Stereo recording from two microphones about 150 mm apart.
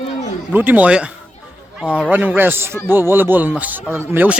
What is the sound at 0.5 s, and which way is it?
Speech, 10° right (ahead or behind).